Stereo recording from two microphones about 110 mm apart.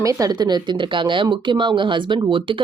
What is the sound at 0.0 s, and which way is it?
A woman's voice, 30° right (ahead or behind).